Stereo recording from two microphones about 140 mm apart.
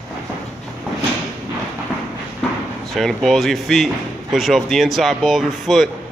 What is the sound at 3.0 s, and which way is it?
Speech, centre (ahead or behind).